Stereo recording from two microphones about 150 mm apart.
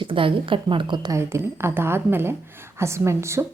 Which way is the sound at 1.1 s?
15° right (ahead or behind).